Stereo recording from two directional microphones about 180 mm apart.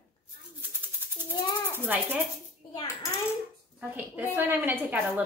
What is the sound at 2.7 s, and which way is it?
Speech, 25° left (ahead or behind).